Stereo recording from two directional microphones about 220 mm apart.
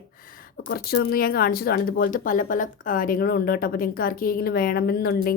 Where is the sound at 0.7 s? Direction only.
50° left (ahead or behind).